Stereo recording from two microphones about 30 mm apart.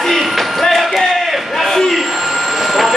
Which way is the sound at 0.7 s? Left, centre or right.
Centre.